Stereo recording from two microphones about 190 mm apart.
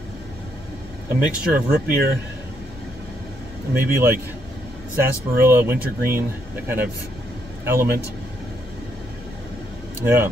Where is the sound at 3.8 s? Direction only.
15° right (ahead or behind).